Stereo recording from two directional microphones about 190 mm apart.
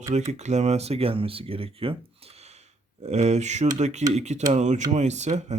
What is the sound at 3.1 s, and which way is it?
Speech, 35° right (ahead or behind).